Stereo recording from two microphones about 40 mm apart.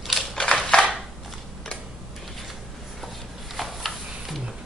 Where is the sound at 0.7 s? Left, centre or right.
Left.